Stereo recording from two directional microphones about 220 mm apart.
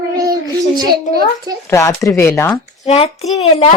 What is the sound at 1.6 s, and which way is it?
Speech, 10° left (ahead or behind).